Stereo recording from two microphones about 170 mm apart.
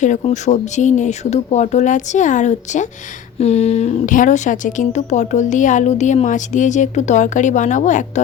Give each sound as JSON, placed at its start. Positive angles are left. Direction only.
{"t": 0.0, "sound": "a woman's voice", "side_deg": 40}